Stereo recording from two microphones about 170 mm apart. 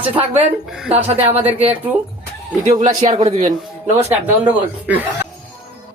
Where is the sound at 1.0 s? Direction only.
35° right (ahead or behind).